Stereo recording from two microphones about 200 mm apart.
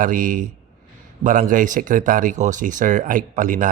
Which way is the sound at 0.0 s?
40° right (ahead or behind).